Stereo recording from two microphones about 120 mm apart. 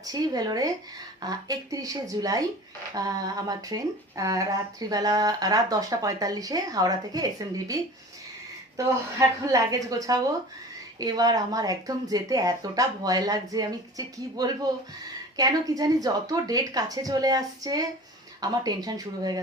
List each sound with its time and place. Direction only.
0.0 s a woman's voice: 30° right (ahead or behind)